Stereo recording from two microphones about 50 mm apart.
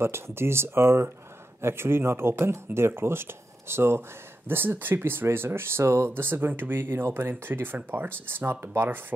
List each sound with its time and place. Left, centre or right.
0.0 s speech: right
4.5 s speech: right
6.0 s speech: right